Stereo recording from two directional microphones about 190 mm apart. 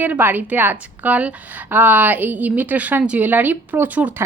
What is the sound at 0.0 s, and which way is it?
A woman's voice, 10° right (ahead or behind).